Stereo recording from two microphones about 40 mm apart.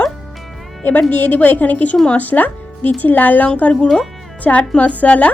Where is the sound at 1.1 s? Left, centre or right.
Left.